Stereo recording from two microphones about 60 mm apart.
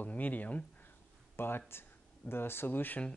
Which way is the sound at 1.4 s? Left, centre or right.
Left.